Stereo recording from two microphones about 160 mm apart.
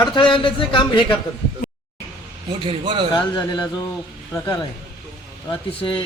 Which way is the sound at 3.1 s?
30° left (ahead or behind).